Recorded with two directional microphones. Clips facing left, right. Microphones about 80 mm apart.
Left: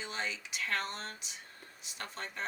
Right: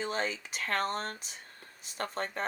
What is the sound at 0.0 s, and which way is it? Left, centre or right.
Speech, right.